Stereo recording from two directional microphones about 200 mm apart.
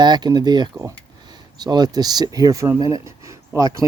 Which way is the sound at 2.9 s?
15° right (ahead or behind).